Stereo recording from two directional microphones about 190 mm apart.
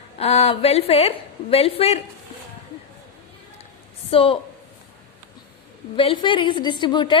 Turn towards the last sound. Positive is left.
turn(degrees=25)  # may be behind; listen again after turning